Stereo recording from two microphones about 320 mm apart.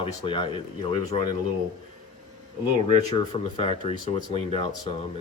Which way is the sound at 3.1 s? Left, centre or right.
Centre.